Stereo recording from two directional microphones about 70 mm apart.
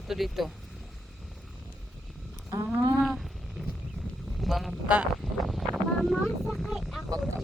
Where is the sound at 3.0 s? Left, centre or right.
Centre.